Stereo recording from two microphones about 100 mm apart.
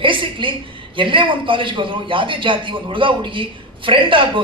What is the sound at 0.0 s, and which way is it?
A woman's voice, 55° right (ahead or behind).